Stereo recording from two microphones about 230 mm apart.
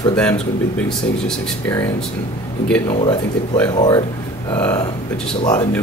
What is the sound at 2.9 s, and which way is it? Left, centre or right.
Speech, left.